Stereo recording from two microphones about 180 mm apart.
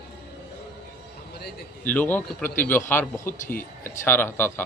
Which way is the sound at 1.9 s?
10° left (ahead or behind).